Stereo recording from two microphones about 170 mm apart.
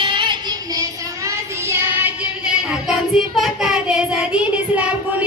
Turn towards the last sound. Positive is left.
turn(degrees=-10)  # may be behind; listen again after turning